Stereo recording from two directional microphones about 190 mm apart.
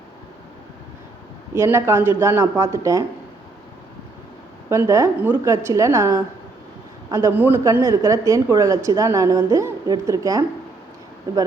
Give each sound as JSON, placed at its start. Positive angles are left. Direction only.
{"t": 1.5, "sound": "speech", "side_deg": -15}
{"t": 4.7, "sound": "speech", "side_deg": -15}